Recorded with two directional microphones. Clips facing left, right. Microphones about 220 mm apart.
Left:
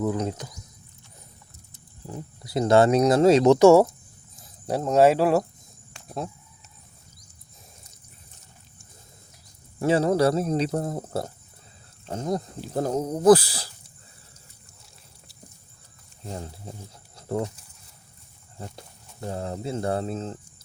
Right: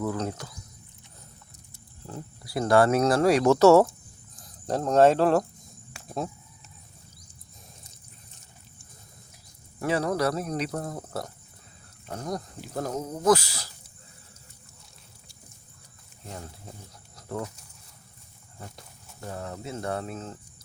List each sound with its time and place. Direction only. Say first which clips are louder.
0.0 s speech: left 3 dB; 20° left (ahead or behind)
1.7 s speech: left 2 dB; 15° left (ahead or behind)
5.9 s a sound: even; 5° right (ahead or behind)
9.8 s speech: left 5 dB; 25° left (ahead or behind)
16.2 s speech: left 5 dB; 35° left (ahead or behind)
17.2 s a sound: left 6 dB; 30° left (ahead or behind)
18.6 s speech: left 5 dB; 30° left (ahead or behind)